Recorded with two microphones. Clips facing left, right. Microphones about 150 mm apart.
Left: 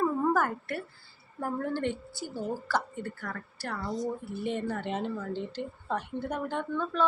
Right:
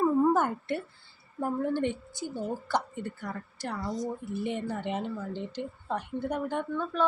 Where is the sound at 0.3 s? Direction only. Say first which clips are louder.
Right 1 dB; 25° right (ahead or behind).